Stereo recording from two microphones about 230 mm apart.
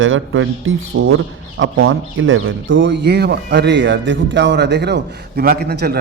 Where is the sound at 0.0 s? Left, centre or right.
Right.